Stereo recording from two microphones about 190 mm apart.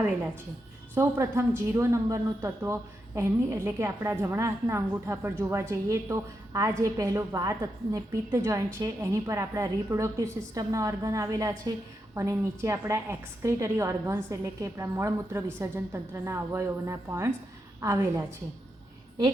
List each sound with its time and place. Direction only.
0.9 s a woman's voice: 15° right (ahead or behind)